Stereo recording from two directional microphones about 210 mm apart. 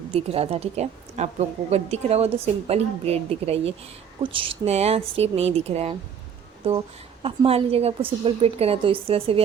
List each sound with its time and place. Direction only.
0.1 s a woman's voice: 30° right (ahead or behind)